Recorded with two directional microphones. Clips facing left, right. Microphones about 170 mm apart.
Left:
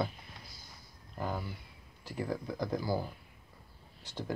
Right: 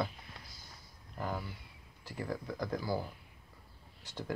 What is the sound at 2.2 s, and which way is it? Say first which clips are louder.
Speech: left 2 dB; 15° left (ahead or behind).